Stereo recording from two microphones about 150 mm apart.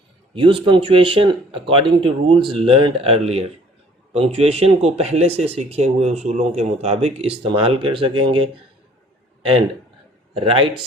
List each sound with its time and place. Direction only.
0.3 s speech: 35° right (ahead or behind)
10.3 s speech: 35° right (ahead or behind)